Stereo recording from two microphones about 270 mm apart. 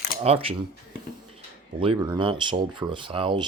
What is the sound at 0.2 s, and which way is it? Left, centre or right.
Speech, right.